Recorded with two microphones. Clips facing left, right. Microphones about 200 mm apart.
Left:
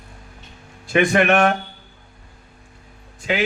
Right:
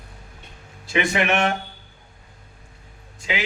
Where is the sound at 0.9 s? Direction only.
55° left (ahead or behind).